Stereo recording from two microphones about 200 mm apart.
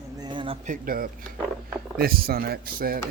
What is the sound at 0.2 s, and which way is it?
Speech, 25° right (ahead or behind).